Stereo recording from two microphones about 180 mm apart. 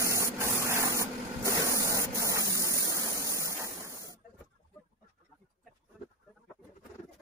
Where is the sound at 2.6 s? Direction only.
20° right (ahead or behind).